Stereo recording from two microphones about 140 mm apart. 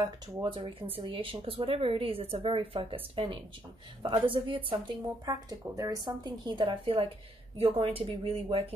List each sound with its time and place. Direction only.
0.0 s speech: 35° right (ahead or behind)
5.2 s speech: 25° right (ahead or behind); by 8.7 s 45° right (ahead or behind)